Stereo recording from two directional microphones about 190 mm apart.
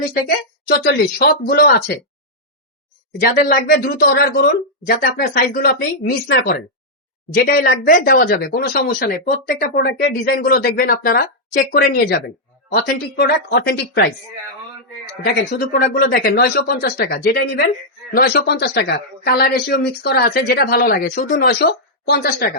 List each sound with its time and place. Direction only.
0.1 s speech: 50° left (ahead or behind)
3.3 s speech: 50° left (ahead or behind)
16.0 s speech: 50° left (ahead or behind)